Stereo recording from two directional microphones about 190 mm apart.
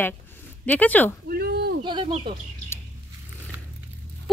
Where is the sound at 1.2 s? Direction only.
55° right (ahead or behind).